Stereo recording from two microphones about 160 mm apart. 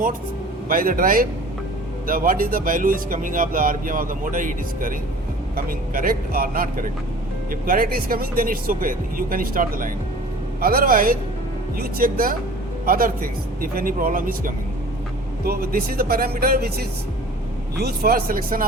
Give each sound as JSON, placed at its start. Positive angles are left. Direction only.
{"t": 0.7, "sound": "speech", "side_deg": -60}
{"t": 15.4, "sound": "speech", "side_deg": -70}
{"t": 17.7, "sound": "speech", "side_deg": -80}